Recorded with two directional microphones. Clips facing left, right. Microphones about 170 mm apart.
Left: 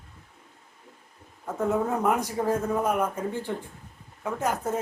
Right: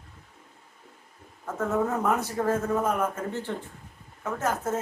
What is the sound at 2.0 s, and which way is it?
A man's voice, 15° left (ahead or behind).